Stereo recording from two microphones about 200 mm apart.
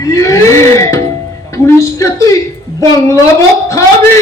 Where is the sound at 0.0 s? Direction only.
15° left (ahead or behind).